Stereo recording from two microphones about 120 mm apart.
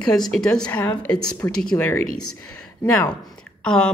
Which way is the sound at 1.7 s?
20° left (ahead or behind).